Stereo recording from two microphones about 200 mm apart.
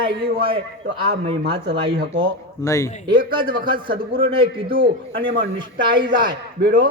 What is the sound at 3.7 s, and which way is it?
A man's voice, 25° right (ahead or behind).